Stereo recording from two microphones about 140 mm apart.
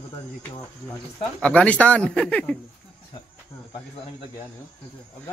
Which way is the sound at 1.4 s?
10° left (ahead or behind).